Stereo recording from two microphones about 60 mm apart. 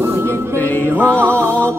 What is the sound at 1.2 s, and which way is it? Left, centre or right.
Music, right.